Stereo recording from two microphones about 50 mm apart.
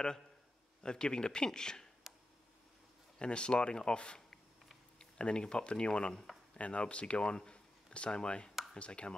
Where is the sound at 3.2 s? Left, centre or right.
Centre.